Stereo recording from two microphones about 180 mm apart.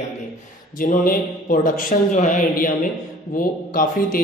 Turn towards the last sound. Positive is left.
turn(degrees=50)  # may be behind; listen again after turning